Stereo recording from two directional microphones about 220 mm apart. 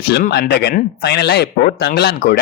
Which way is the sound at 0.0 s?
50° left (ahead or behind).